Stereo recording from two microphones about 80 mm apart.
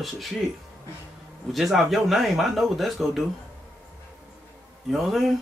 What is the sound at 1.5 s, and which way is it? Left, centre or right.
Speech, centre.